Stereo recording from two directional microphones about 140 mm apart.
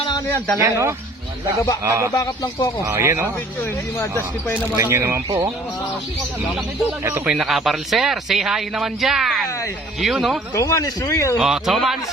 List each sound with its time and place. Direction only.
0.6 s speech: 25° right (ahead or behind)
2.1 s speech: 25° left (ahead or behind)
2.8 s speech: 20° right (ahead or behind)
3.9 s speech: 15° left (ahead or behind)
4.8 s speech: 20° right (ahead or behind)
7.3 s speech: 5° right (ahead or behind)
10.5 s speech: 20° left (ahead or behind)
11.3 s speech: 5° right (ahead or behind)